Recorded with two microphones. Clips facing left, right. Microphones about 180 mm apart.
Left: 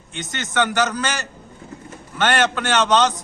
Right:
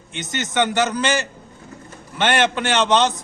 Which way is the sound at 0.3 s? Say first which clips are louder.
Right 1 dB; 20° right (ahead or behind).